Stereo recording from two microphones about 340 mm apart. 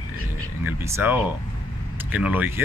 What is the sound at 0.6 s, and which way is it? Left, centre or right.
Speech, centre.